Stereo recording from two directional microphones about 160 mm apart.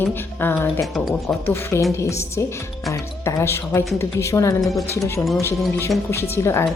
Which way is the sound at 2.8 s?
20° left (ahead or behind).